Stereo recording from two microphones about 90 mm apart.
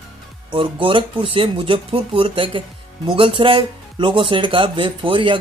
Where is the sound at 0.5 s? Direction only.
70° right (ahead or behind).